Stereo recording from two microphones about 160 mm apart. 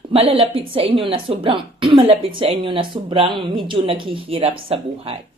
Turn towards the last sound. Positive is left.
turn(degrees=-35)  # may be behind; listen again after turning